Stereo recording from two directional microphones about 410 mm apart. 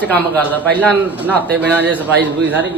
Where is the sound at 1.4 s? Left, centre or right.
Right.